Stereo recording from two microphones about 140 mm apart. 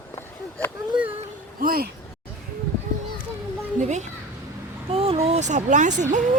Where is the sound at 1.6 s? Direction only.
90° right.